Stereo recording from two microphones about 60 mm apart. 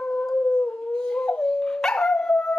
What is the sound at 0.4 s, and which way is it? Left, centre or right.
Dog, left.